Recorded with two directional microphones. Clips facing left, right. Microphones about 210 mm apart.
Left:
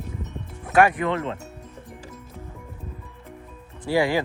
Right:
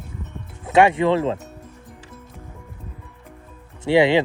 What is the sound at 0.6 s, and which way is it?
Speech, 25° right (ahead or behind).